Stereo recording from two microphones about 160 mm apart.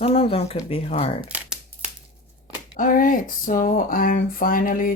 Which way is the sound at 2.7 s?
60° left (ahead or behind).